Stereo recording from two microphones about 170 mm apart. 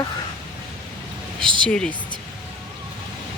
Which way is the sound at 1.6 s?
5° left (ahead or behind).